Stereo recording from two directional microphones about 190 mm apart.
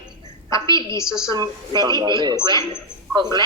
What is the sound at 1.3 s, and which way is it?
A woman's voice, 20° right (ahead or behind).